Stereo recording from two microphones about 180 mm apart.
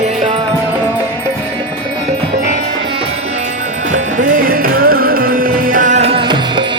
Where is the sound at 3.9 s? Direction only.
45° right (ahead or behind).